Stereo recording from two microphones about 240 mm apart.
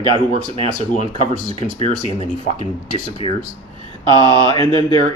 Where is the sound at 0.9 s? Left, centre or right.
Left.